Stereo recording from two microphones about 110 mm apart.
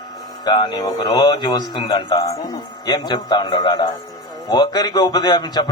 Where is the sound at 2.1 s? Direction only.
30° left (ahead or behind).